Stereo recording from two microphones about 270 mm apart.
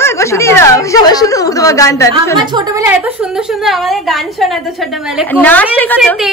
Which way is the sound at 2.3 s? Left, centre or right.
Centre.